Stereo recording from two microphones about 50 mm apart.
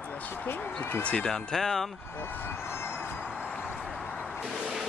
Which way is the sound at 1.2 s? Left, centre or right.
Centre.